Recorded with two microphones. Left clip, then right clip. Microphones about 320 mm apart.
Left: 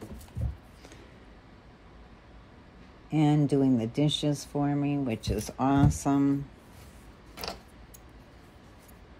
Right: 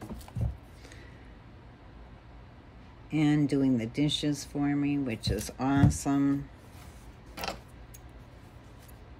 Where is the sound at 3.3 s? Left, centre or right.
Centre.